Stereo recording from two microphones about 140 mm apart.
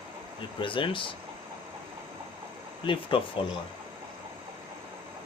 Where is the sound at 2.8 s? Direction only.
35° left (ahead or behind).